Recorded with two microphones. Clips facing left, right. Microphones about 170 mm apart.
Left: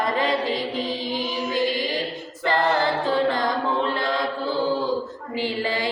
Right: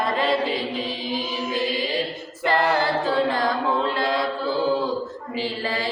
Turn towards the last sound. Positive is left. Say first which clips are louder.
# left 2 dB
turn(degrees=15)  # may be behind; listen again after turning